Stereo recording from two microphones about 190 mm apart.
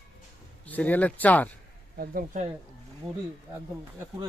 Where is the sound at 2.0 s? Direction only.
50° right (ahead or behind).